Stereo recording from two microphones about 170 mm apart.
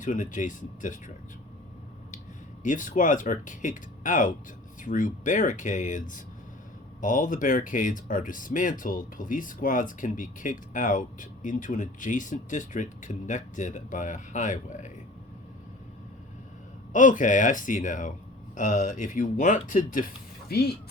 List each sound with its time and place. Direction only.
0.0 s speech: 50° left (ahead or behind)
2.6 s speech: 50° left (ahead or behind)
16.9 s speech: 50° left (ahead or behind)